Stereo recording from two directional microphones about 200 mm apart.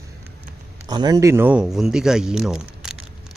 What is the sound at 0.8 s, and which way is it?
Speech, 20° right (ahead or behind).